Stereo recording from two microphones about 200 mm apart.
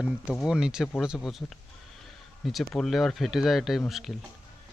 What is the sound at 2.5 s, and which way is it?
Speech, centre (ahead or behind).